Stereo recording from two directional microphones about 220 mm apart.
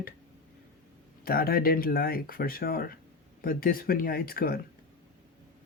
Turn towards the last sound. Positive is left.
turn(degrees=40)  # may be behind; listen again after turning